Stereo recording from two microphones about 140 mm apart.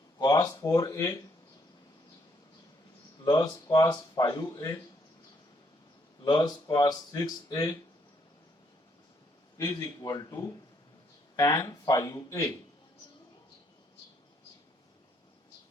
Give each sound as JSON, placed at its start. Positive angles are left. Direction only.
{"t": 0.2, "sound": "speech", "side_deg": 25}
{"t": 3.2, "sound": "speech", "side_deg": 25}
{"t": 6.2, "sound": "speech", "side_deg": 30}
{"t": 9.6, "sound": "speech", "side_deg": 25}